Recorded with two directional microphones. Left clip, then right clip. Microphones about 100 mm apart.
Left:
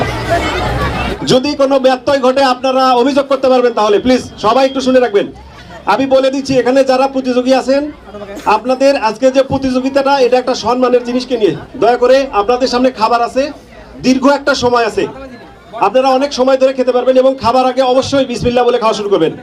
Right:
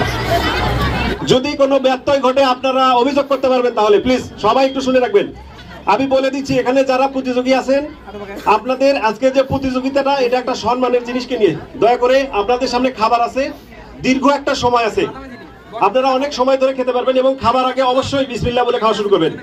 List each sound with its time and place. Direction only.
1.2 s speech: 20° left (ahead or behind)
16.8 s a man's voice: 35° left (ahead or behind)